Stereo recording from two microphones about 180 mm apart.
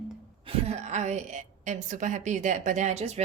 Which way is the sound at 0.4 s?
35° right (ahead or behind).